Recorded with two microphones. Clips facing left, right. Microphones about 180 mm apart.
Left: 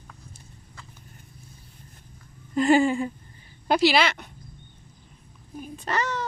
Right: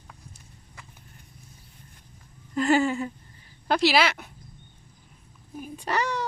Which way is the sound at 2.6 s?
15° left (ahead or behind).